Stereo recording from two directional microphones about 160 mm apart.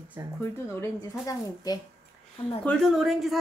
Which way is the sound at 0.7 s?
20° left (ahead or behind).